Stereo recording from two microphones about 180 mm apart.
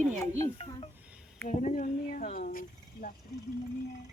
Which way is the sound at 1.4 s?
45° left (ahead or behind).